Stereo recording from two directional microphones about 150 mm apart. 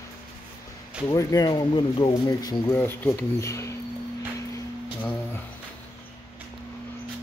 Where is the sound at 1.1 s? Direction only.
25° left (ahead or behind).